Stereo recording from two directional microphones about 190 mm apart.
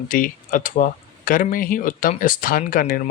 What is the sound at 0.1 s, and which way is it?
Speech, 45° left (ahead or behind).